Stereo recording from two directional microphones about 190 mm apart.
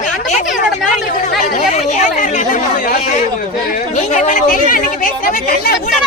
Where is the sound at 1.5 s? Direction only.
40° left (ahead or behind).